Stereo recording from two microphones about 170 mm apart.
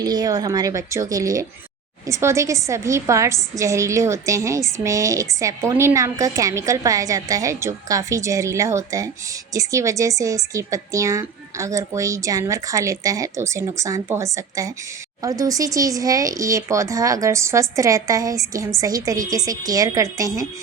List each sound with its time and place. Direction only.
0.0 s a woman's voice: 25° right (ahead or behind)